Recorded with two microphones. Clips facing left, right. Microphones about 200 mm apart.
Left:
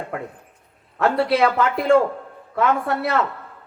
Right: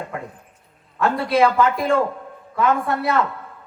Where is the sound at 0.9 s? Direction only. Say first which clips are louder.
Even; 65° left (ahead or behind).